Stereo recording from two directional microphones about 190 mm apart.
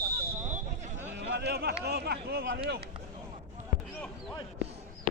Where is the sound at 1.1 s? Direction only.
70° right (ahead or behind).